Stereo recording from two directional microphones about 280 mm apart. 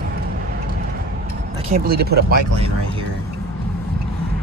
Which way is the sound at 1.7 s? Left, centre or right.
Right.